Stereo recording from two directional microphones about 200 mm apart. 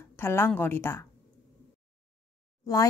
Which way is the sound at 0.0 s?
10° left (ahead or behind).